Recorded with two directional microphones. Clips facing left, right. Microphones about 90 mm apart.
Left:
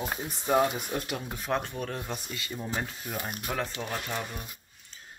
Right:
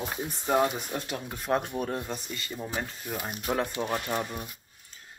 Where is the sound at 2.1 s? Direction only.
Centre (ahead or behind).